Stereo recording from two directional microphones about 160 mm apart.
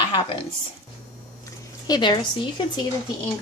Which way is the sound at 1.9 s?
25° left (ahead or behind).